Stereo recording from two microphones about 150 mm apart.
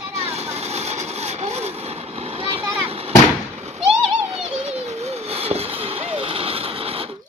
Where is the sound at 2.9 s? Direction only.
40° right (ahead or behind).